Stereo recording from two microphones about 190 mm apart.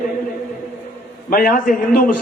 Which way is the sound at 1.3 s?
50° left (ahead or behind).